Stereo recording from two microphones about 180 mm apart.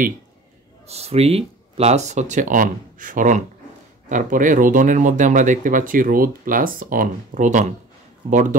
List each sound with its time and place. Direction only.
0.8 s speech: 35° right (ahead or behind)